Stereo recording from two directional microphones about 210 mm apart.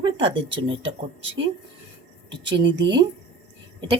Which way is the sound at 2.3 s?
20° right (ahead or behind).